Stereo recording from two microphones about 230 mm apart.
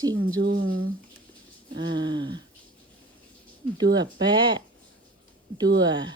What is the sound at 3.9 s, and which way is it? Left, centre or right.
Speech, centre.